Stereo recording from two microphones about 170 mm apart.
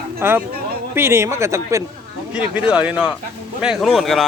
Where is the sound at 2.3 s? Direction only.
5° right (ahead or behind).